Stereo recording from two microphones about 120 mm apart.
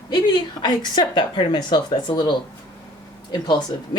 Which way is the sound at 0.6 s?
35° left (ahead or behind).